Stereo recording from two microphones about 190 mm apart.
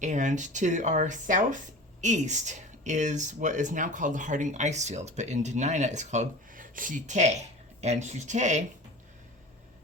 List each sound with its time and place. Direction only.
0.0 s speech: 40° right (ahead or behind)